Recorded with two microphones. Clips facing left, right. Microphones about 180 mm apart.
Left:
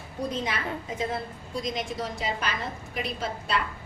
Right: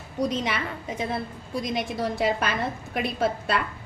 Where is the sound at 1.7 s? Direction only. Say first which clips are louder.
Right 4 dB; 60° right (ahead or behind).